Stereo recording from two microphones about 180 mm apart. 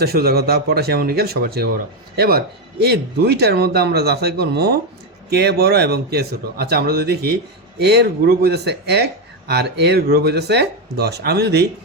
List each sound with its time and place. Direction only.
0.0 s speech: 60° right (ahead or behind)